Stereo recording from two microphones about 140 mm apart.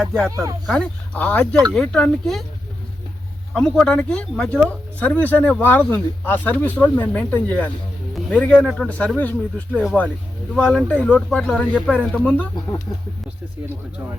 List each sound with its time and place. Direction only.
0.0 s speech: 5° left (ahead or behind)
0.3 s speech: 20° right (ahead or behind)
0.7 s speech: 10° left (ahead or behind)
3.5 s speech: 5° left (ahead or behind)
10.5 s speech: 5° left (ahead or behind)